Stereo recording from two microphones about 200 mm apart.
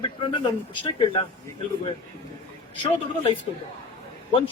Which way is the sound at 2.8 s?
25° left (ahead or behind).